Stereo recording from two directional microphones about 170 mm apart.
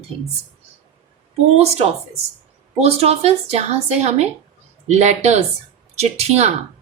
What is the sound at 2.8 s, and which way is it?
A woman's voice, 35° right (ahead or behind).